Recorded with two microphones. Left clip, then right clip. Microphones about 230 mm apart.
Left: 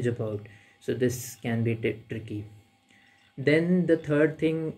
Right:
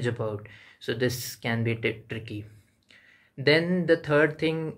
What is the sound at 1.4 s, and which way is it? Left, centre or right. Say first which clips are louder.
Speech: right 1 dB; centre.